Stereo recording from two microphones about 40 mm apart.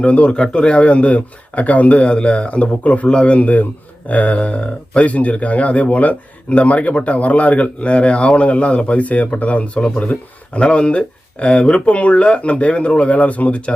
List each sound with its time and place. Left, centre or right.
0.0 s speech: left